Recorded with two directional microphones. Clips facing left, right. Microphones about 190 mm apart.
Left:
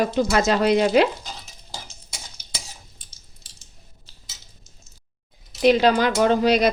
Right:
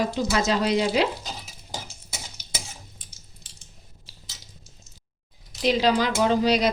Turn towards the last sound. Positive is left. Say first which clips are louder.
# left 3 dB
turn(degrees=55)  # may be behind; listen again after turning